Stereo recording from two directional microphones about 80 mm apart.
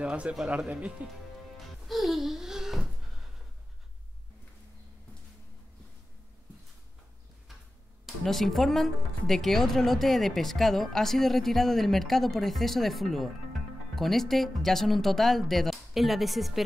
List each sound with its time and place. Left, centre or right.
0.0 s speech: centre
1.9 s a sound: centre
8.2 s speech: centre